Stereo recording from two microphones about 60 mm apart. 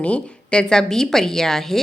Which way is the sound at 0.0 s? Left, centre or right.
Centre.